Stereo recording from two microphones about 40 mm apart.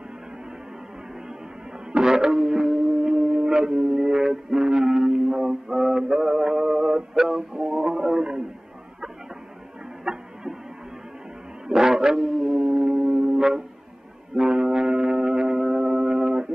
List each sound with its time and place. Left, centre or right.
1.9 s music: centre
7.5 s a man's voice: centre
10.0 s music: centre
11.6 s a sound: centre
14.3 s music: centre